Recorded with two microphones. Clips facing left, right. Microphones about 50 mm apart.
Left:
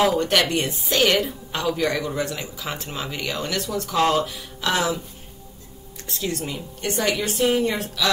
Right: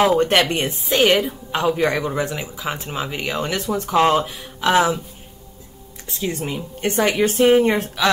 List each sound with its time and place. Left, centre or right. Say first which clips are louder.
0.0 s speech: right 4 dB; right
6.0 s a woman's voice: right 3 dB; centre; by 8.1 s right